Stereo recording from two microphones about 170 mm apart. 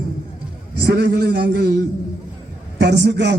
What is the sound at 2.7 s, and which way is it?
Speech, 90° right.